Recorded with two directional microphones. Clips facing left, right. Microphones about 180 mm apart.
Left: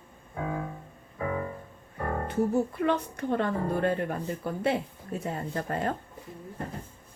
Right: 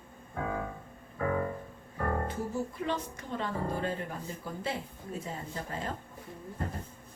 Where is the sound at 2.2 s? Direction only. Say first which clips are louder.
Left 8 dB; 60° left (ahead or behind).